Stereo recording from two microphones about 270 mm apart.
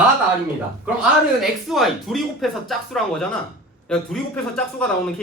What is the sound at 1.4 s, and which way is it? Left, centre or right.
Speech, centre.